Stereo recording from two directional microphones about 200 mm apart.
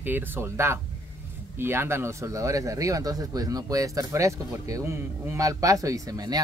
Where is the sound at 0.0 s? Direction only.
10° right (ahead or behind).